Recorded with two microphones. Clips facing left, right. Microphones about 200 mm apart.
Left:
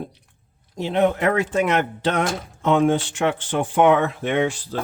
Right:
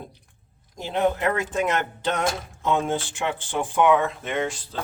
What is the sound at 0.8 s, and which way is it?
Speech, 70° left (ahead or behind).